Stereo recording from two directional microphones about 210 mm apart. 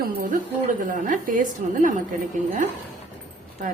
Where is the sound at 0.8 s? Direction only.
40° right (ahead or behind).